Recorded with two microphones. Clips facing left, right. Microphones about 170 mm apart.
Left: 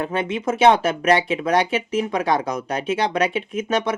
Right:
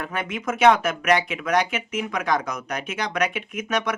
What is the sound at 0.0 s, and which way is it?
Speech, 25° left (ahead or behind).